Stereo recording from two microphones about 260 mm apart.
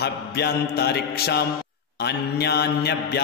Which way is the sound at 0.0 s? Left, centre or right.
Left.